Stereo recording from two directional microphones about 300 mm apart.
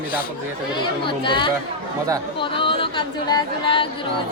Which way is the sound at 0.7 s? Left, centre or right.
Centre.